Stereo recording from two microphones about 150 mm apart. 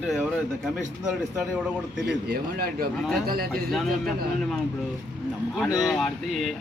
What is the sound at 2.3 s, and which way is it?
A man's voice, 90° right.